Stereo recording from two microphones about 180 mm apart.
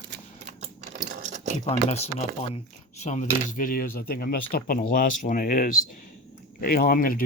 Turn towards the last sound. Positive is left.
turn(degrees=50)  # may be behind; listen again after turning